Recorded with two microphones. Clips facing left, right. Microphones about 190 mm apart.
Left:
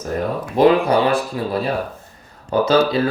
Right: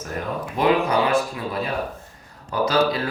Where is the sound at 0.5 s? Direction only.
35° left (ahead or behind).